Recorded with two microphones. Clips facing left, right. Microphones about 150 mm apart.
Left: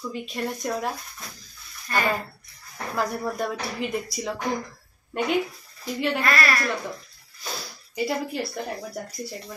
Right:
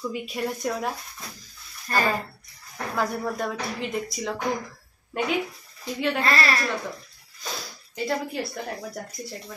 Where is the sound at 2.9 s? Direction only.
5° left (ahead or behind).